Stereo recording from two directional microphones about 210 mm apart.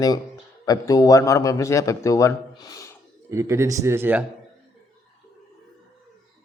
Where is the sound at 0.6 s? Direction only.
15° left (ahead or behind).